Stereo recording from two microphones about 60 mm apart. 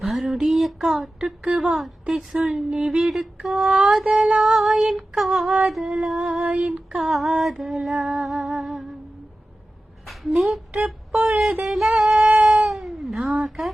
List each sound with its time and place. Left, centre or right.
0.0 s a sound: centre
1.2 s female singing: centre
1.6 s music: centre
4.2 s female singing: centre
5.7 s music: centre
6.4 s female singing: centre
7.1 s music: centre
10.1 s speech: centre
10.8 s a sound: centre
11.6 s music: centre
12.1 s cat: right
12.6 s cat: centre
13.1 s music: centre